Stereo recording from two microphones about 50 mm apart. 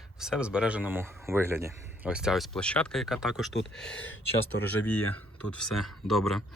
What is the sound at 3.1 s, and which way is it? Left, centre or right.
Speech, centre.